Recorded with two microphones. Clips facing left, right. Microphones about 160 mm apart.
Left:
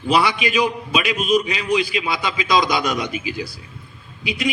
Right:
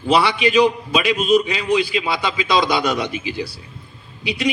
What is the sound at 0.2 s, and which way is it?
A man's voice, 35° right (ahead or behind).